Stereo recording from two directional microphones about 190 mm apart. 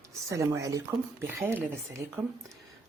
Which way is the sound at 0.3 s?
15° right (ahead or behind).